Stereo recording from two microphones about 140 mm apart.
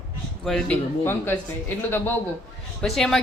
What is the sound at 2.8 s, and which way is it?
Speech, centre (ahead or behind).